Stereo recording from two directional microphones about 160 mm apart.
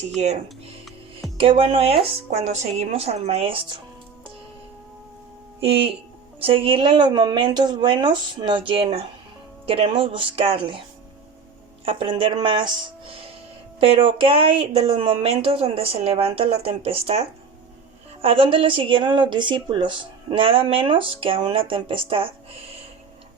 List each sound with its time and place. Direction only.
1.4 s a woman's voice: 35° right (ahead or behind)
5.6 s a woman's voice: 35° right (ahead or behind)
11.9 s a woman's voice: 35° right (ahead or behind)
13.7 s a woman's voice: 35° right (ahead or behind)